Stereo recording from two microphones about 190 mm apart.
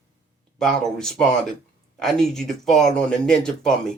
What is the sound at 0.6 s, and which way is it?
Speech, centre (ahead or behind).